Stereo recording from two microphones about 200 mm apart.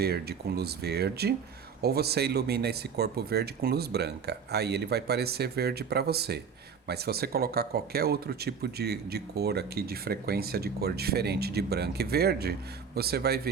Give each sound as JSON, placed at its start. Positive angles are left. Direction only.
{"t": 0.0, "sound": "speech", "side_deg": -50}